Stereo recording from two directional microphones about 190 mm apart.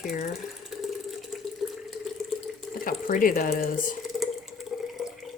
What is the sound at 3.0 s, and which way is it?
Speech, 45° left (ahead or behind).